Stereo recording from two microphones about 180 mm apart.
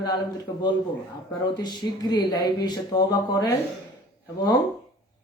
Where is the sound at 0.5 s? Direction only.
20° left (ahead or behind).